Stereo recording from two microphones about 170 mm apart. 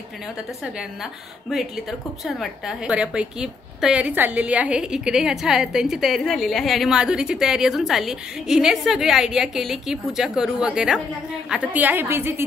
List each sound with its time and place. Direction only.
1.5 s a woman's voice: centre (ahead or behind)